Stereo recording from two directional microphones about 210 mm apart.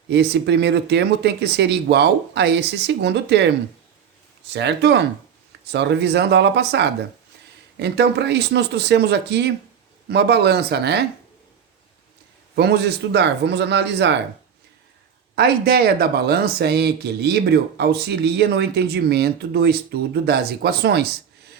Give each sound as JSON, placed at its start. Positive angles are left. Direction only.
{"t": 0.1, "sound": "speech", "side_deg": -55}
{"t": 4.5, "sound": "speech", "side_deg": -55}
{"t": 12.5, "sound": "speech", "side_deg": -50}
{"t": 15.4, "sound": "speech", "side_deg": -50}